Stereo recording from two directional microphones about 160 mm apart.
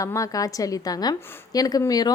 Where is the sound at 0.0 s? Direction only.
20° left (ahead or behind).